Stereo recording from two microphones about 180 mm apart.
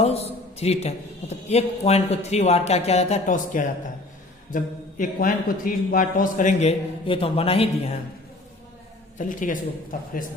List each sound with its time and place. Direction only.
0.0 s a man's voice: 35° left (ahead or behind)
9.1 s a man's voice: 45° left (ahead or behind)